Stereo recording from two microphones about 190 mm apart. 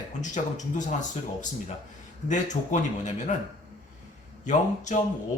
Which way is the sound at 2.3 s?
40° left (ahead or behind).